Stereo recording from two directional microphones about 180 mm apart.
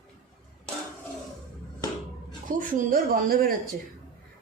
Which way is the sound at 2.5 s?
45° right (ahead or behind).